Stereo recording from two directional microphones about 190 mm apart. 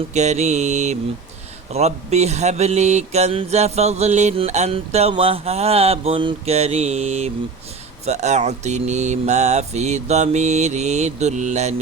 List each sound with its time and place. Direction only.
0.1 s mantra: 35° right (ahead or behind)